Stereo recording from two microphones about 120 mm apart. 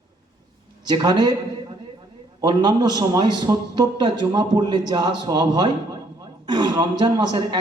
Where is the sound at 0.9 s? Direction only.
35° right (ahead or behind).